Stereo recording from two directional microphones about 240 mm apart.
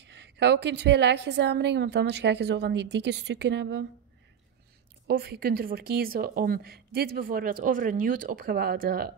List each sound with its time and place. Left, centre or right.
0.0 s a woman's voice: right
5.0 s speech: right